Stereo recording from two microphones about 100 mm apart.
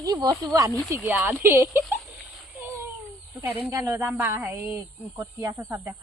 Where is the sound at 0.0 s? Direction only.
35° right (ahead or behind).